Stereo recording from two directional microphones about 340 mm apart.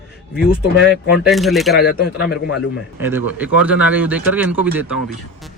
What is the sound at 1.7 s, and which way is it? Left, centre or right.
Speech, left.